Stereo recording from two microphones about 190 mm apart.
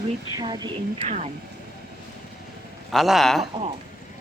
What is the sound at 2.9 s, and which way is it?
Speech, centre (ahead or behind).